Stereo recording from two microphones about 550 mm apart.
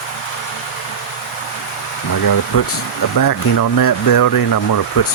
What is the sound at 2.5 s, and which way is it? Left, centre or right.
Speech, left.